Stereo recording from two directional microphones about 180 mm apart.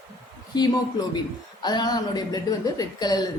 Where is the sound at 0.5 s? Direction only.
20° left (ahead or behind).